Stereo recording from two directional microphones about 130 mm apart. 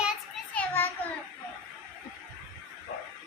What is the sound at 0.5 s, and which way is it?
Children playing, 15° left (ahead or behind).